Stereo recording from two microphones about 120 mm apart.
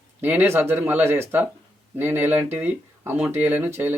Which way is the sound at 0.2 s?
15° right (ahead or behind).